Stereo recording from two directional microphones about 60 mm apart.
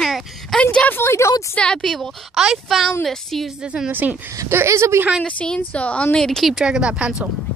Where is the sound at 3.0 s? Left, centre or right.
Centre.